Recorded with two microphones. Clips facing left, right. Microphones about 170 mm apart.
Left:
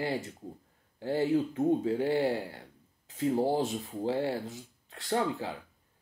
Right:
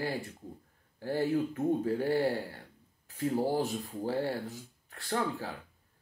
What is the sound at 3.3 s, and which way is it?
Speech, 20° left (ahead or behind).